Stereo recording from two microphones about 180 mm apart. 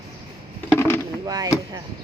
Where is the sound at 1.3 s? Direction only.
20° right (ahead or behind).